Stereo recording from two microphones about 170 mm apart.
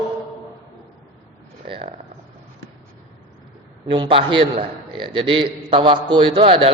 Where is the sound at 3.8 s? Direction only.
30° right (ahead or behind).